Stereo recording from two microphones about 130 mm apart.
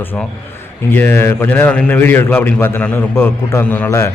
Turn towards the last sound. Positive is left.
turn(degrees=20)  # may be behind; listen again after turning